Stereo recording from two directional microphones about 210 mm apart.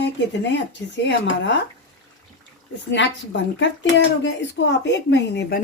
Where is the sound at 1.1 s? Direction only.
60° left (ahead or behind).